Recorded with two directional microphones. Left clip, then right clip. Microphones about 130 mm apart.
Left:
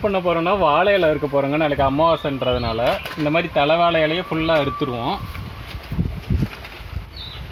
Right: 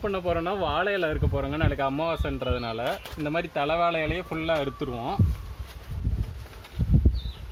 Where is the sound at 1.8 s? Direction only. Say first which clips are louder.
Left 11 dB; 35° right (ahead or behind).